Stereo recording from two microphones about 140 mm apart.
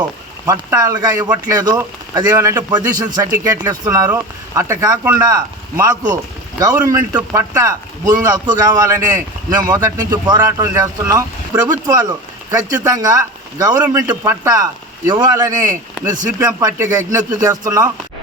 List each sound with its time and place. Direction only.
0.4 s a man's voice: 25° right (ahead or behind)